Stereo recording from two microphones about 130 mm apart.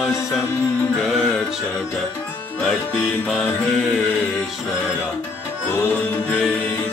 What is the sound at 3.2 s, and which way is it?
Music, centre (ahead or behind).